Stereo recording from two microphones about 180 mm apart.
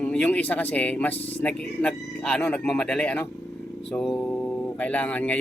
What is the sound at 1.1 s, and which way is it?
Speech, 35° left (ahead or behind).